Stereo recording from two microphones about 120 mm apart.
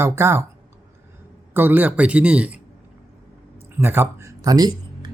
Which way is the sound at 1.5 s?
15° right (ahead or behind).